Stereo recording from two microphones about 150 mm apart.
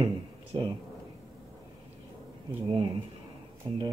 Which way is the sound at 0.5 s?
30° right (ahead or behind).